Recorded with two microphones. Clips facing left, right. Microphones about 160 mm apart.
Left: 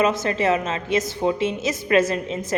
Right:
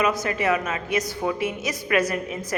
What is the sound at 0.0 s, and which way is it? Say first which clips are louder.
A woman's voice: left 3 dB; 25° left (ahead or behind).